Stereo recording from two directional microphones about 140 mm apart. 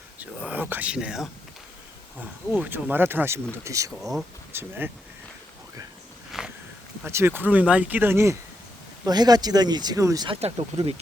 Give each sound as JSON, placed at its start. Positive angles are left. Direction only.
{"t": 0.2, "sound": "speech", "side_deg": -10}
{"t": 2.5, "sound": "speech", "side_deg": -15}
{"t": 6.3, "sound": "walk", "side_deg": 0}
{"t": 7.0, "sound": "speech", "side_deg": -15}
{"t": 10.2, "sound": "speech", "side_deg": -45}